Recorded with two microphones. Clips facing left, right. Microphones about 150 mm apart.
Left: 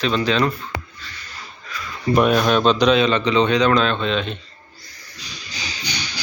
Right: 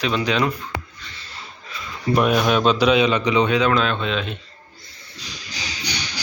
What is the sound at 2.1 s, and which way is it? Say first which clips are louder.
A man's voice: left 2 dB; 5° right (ahead or behind).